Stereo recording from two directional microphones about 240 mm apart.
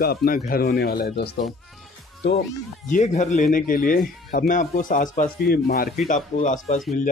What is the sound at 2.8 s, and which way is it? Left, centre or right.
Speech, left.